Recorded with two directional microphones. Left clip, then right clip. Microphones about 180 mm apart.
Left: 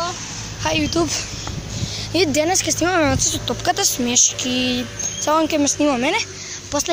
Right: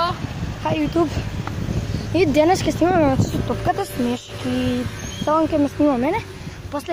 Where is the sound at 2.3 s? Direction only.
20° right (ahead or behind).